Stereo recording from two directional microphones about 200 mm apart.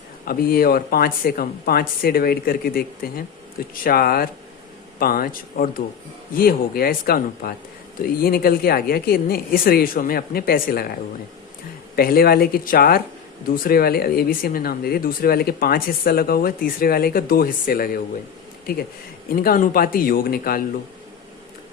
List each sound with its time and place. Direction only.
0.3 s speech: 50° left (ahead or behind)
11.9 s speech: 50° left (ahead or behind)
19.4 s speech: 45° left (ahead or behind)